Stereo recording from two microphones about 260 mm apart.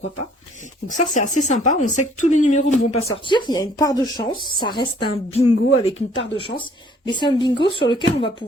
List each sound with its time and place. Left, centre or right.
0.9 s a woman's voice: left